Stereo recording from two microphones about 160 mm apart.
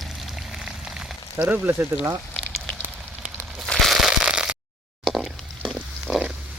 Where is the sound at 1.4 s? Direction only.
10° right (ahead or behind).